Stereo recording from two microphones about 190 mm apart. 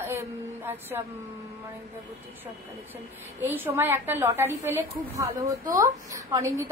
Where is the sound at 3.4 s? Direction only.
10° right (ahead or behind).